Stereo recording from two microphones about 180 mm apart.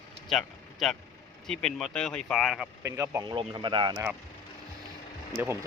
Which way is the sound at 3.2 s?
25° right (ahead or behind).